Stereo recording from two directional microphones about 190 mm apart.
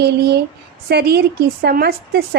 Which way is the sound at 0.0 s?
60° right (ahead or behind).